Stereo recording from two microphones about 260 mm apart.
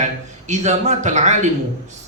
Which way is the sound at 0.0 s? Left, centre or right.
Right.